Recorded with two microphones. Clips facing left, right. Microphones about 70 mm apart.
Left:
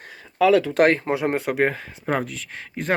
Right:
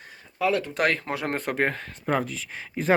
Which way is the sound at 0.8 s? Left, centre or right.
Left.